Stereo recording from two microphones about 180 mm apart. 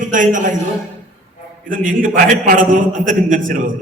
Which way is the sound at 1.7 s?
50° right (ahead or behind).